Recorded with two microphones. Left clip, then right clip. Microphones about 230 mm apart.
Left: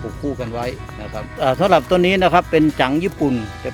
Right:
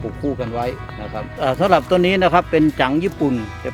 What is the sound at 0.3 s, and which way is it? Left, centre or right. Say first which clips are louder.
Speech: right 2 dB; centre.